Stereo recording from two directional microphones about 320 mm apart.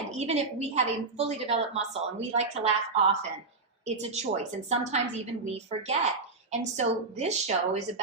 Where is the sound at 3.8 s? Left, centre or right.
Right.